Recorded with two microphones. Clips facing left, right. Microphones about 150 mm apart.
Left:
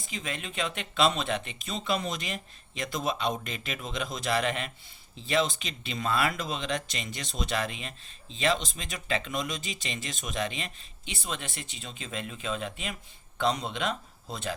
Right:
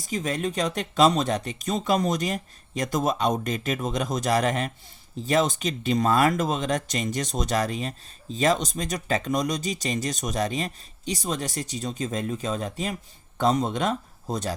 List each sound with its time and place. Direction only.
0.0 s speech: 40° right (ahead or behind)